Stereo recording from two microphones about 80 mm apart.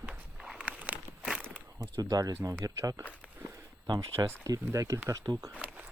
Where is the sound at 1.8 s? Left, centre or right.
Right.